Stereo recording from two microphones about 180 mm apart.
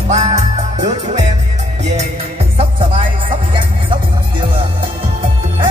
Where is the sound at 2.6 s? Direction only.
30° right (ahead or behind).